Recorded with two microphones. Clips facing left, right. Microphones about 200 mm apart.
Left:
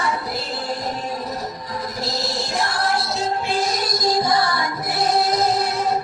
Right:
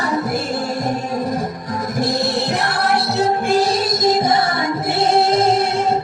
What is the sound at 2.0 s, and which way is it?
Music, 55° right (ahead or behind).